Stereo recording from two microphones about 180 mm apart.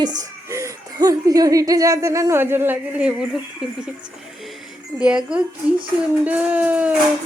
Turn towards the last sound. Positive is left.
turn(degrees=-5)  # may be behind; listen again after turning